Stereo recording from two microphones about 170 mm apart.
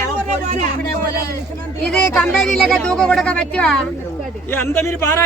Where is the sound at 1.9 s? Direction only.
10° left (ahead or behind).